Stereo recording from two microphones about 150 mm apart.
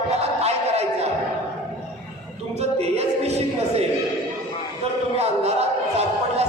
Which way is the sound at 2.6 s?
45° right (ahead or behind).